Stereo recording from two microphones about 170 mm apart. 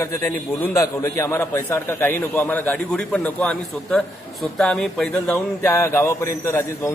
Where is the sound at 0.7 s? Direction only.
15° left (ahead or behind).